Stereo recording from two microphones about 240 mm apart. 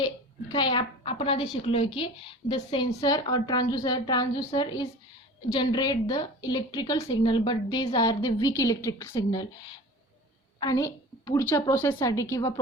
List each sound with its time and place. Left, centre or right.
0.0 s a woman's voice: centre
10.6 s a woman's voice: centre